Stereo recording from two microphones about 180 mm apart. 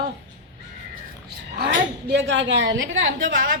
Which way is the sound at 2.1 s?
80° right.